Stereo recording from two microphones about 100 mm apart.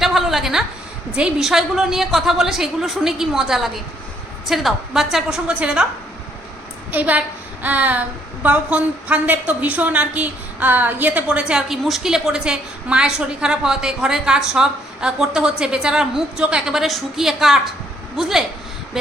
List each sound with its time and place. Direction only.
0.0 s a sound: centre (ahead or behind)
1.1 s a woman's voice: 5° right (ahead or behind)
6.9 s a woman's voice: 15° right (ahead or behind)